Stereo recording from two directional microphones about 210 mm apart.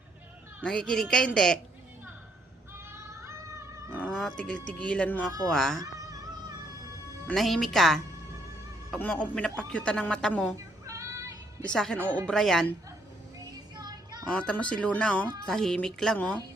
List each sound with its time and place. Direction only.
0.6 s a man's voice: 5° left (ahead or behind)
2.9 s synthetic singing: 10° right (ahead or behind)
4.1 s a man's voice: 5° left (ahead or behind)
5.8 s a sound: 15° right (ahead or behind)
7.3 s a man's voice: centre (ahead or behind)
10.8 s music: 15° right (ahead or behind)
11.7 s a man's voice: 5° left (ahead or behind)
13.5 s music: 20° right (ahead or behind)
14.3 s a man's voice: 5° left (ahead or behind)